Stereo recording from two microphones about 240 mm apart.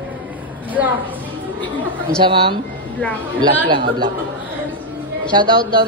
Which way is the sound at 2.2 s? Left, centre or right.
Right.